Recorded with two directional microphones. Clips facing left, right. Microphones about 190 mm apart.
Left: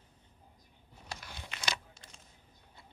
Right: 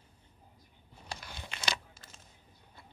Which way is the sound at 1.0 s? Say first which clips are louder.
Right 2 dB; 30° right (ahead or behind).